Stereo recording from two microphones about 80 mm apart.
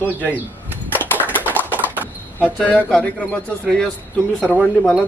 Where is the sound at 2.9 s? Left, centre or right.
Centre.